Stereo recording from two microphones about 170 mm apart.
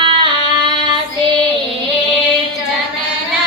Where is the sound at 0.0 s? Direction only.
30° right (ahead or behind).